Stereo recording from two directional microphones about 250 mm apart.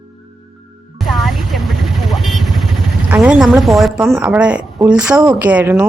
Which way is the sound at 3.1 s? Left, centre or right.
Centre.